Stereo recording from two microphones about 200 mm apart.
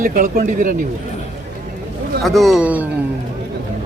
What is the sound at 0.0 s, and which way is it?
Speech, 40° right (ahead or behind).